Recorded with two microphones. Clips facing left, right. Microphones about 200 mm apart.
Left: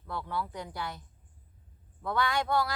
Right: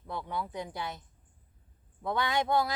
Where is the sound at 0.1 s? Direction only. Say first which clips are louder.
Even; 20° right (ahead or behind).